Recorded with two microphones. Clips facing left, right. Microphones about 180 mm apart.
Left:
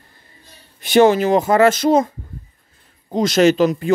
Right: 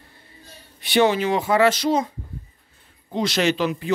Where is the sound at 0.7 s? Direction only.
45° left (ahead or behind).